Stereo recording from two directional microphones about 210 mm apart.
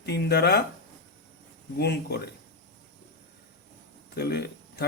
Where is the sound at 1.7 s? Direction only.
50° left (ahead or behind).